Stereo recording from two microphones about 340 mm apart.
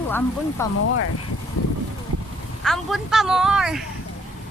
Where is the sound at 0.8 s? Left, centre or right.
Left.